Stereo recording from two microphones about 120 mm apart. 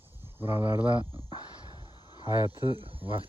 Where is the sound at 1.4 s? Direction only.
35° left (ahead or behind).